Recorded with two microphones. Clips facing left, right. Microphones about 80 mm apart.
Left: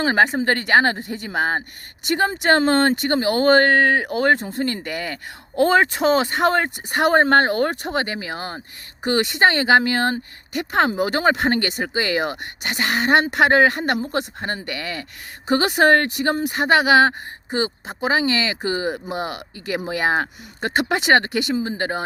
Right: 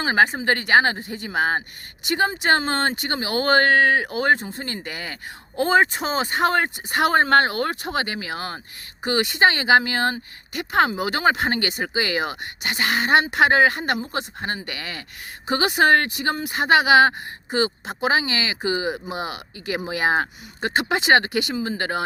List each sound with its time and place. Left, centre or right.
0.0 s speech: left
6.5 s speech: left
9.0 s speech: left
21.5 s speech: left